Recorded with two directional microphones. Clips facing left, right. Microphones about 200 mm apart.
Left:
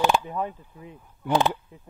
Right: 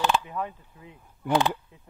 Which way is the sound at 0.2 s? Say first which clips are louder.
Left 3 dB; 30° left (ahead or behind).